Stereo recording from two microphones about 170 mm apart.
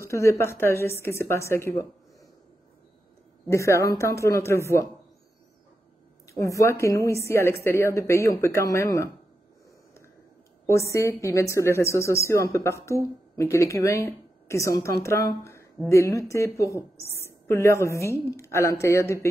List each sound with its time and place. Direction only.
0.0 s a woman's voice: 15° left (ahead or behind)
3.4 s a woman's voice: 15° left (ahead or behind)
6.2 s a woman's voice: 20° left (ahead or behind)
10.7 s a woman's voice: 15° left (ahead or behind)